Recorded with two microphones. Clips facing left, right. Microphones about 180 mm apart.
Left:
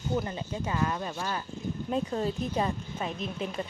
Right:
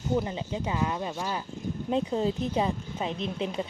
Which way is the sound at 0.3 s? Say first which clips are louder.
Right 2 dB; 15° right (ahead or behind).